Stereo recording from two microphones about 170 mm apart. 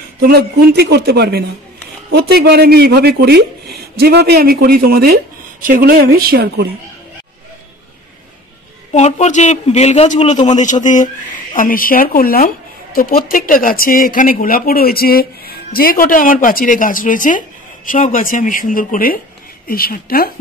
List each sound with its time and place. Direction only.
0.2 s a man's voice: 65° right (ahead or behind)
8.9 s a man's voice: 40° left (ahead or behind); by 20.2 s 60° left (ahead or behind)